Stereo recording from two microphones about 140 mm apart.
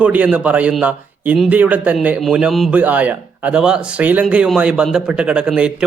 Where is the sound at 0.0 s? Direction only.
10° right (ahead or behind).